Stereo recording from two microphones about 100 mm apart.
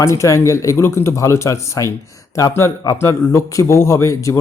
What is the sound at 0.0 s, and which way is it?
Speech, 30° left (ahead or behind).